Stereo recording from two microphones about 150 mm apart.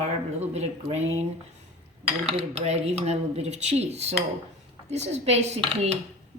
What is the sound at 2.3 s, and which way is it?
Dishes, 45° right (ahead or behind).